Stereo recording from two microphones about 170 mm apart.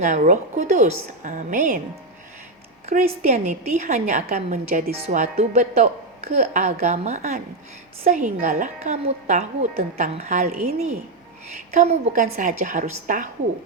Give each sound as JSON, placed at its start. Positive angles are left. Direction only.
{"t": 0.0, "sound": "a woman's voice", "side_deg": -45}
{"t": 3.0, "sound": "a woman's voice", "side_deg": -40}
{"t": 4.9, "sound": "a woman's voice", "side_deg": -40}